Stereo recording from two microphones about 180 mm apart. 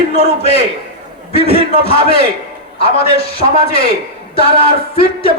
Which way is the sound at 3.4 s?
35° right (ahead or behind).